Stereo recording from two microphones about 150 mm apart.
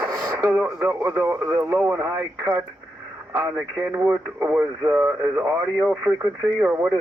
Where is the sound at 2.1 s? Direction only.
10° right (ahead or behind).